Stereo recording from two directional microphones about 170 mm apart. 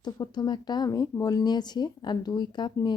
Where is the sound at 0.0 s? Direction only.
25° left (ahead or behind).